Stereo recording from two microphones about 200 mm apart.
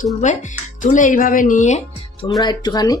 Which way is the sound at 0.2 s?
35° left (ahead or behind).